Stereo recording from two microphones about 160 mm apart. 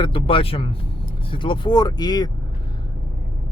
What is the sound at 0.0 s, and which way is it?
Speech, 35° left (ahead or behind).